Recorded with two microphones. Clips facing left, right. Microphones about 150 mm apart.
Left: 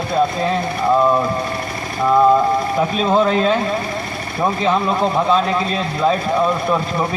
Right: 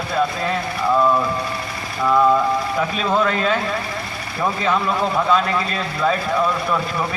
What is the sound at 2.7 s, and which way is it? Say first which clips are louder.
A man's voice: left 5 dB; 30° left (ahead or behind).